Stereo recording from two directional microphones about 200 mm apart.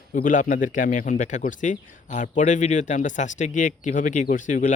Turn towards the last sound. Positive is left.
turn(degrees=40)  # may be behind; listen again after turning